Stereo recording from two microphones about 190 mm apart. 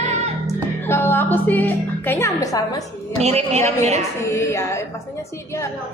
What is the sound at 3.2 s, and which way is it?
Speech, 35° right (ahead or behind).